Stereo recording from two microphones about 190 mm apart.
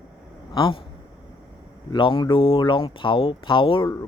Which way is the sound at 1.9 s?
25° left (ahead or behind).